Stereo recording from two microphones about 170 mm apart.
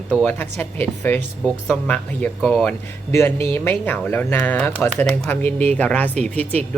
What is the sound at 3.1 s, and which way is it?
Speech, 15° left (ahead or behind).